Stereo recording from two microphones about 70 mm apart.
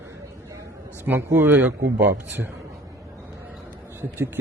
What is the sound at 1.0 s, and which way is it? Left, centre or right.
Speech, right.